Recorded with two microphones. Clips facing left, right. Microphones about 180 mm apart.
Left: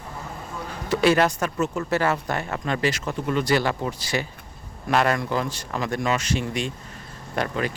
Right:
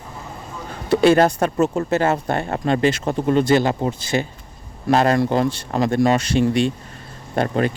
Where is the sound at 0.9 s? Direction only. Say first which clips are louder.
Right 5 dB; 30° right (ahead or behind).